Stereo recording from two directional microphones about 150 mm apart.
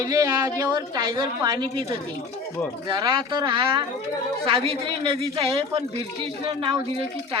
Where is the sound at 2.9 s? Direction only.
30° right (ahead or behind).